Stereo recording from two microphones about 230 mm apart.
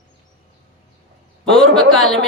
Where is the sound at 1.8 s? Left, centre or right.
Centre.